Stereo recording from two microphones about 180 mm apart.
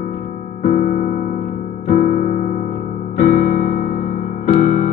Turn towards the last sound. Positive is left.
turn(degrees=50)  # may be behind; listen again after turning